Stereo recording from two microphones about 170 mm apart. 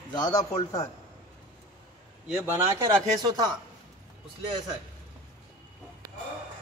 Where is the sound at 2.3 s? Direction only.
10° right (ahead or behind).